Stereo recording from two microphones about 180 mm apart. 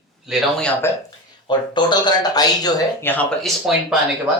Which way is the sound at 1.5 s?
25° left (ahead or behind).